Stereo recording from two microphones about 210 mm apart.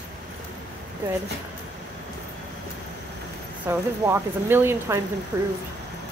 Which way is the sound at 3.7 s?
10° right (ahead or behind).